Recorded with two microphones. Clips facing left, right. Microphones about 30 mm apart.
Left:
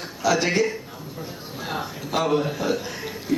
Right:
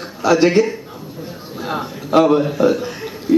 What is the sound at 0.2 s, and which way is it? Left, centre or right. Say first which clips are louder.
Speech: right 6 dB; centre.